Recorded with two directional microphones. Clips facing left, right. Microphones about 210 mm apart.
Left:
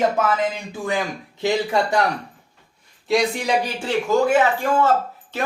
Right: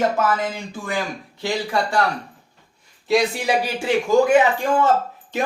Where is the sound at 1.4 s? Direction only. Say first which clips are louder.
Left 3 dB; 20° left (ahead or behind).